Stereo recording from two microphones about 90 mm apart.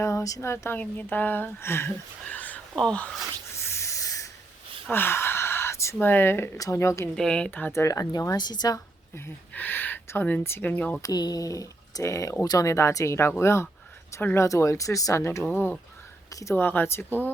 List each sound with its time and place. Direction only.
0.0 s speech: 35° left (ahead or behind)
0.5 s speech: 25° left (ahead or behind)
2.2 s a sound: 20° left (ahead or behind)
2.7 s speech: 10° left (ahead or behind)
3.5 s a sound: 30° left (ahead or behind)
4.9 s speech: 25° left (ahead or behind)
7.2 s speech: 10° left (ahead or behind)
7.7 s speech: 35° left (ahead or behind)
8.4 s a woman's voice: 50° left (ahead or behind)
9.5 s speech: 20° left (ahead or behind)
11.0 s speech: 45° left (ahead or behind)
15.4 s speech: 15° left (ahead or behind)
16.3 s speech: 35° left (ahead or behind)
16.6 s speech: 25° left (ahead or behind)